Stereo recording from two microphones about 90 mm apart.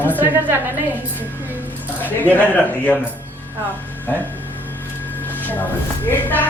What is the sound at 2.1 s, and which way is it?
Speech, 20° left (ahead or behind).